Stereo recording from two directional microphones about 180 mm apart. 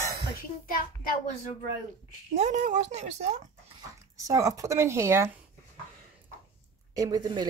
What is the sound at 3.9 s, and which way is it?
Speech, 20° right (ahead or behind).